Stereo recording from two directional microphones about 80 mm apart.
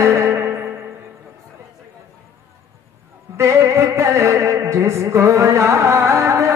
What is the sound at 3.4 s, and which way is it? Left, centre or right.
Music, right.